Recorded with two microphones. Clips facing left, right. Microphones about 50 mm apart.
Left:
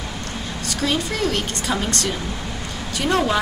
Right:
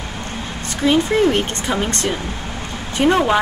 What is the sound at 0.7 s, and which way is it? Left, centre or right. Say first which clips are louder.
A woman's voice: right 8 dB; right.